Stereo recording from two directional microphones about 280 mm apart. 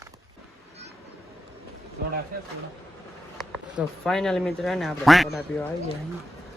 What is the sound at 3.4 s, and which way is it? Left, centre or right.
Speech, centre.